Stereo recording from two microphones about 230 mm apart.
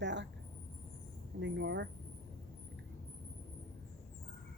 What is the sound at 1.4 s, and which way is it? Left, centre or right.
Speech, right.